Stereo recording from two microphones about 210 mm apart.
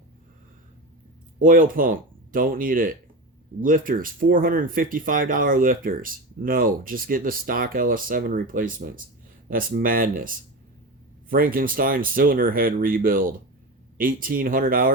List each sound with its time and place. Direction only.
1.4 s speech: 40° right (ahead or behind)